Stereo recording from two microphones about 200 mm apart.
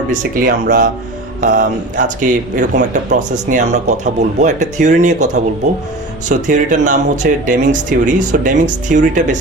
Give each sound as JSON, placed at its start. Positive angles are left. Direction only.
{"t": 0.1, "sound": "speech", "side_deg": -45}